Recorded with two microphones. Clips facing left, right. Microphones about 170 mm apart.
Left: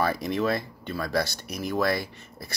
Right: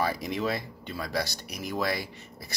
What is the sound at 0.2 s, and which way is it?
Speech, 15° right (ahead or behind).